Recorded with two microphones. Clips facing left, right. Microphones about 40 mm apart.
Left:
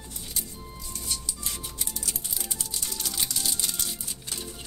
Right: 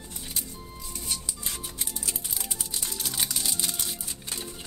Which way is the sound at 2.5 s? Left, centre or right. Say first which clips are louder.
Even; centre.